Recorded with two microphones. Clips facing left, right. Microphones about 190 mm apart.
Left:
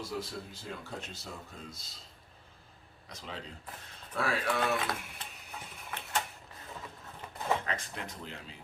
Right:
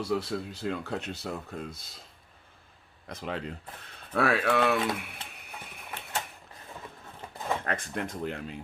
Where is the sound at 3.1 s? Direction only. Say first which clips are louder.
Right 9 dB; 60° right (ahead or behind).